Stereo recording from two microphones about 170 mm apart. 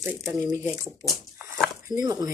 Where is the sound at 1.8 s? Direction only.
20° right (ahead or behind).